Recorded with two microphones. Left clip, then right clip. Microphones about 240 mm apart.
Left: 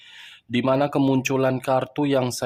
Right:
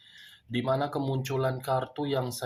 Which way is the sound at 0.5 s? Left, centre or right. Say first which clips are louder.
Left 8 dB; left.